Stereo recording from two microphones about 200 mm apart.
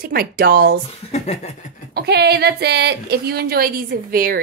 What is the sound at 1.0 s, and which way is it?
Speech, 35° left (ahead or behind).